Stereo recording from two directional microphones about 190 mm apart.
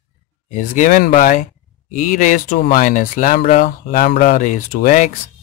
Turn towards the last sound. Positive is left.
turn(degrees=45)  # may be behind; listen again after turning